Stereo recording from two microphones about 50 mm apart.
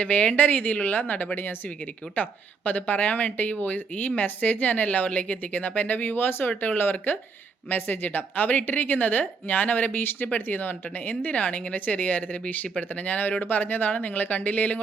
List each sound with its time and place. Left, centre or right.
0.0 s speech: left